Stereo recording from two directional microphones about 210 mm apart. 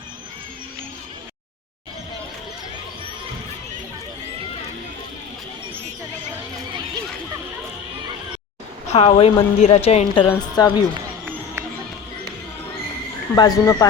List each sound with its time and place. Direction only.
8.9 s a woman's voice: 25° left (ahead or behind)
10.2 s a woman's voice: 15° left (ahead or behind)
13.3 s a woman's voice: 20° left (ahead or behind)